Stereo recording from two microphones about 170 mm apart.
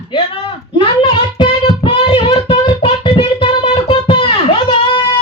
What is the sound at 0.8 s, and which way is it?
Child singing, 30° left (ahead or behind).